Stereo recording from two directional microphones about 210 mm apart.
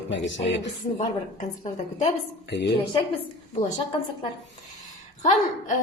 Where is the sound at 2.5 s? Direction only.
55° left (ahead or behind).